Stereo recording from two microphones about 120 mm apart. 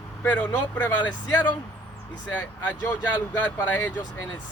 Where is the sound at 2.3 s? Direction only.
15° left (ahead or behind).